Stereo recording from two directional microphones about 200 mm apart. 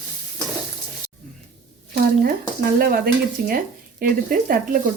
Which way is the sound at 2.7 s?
45° right (ahead or behind).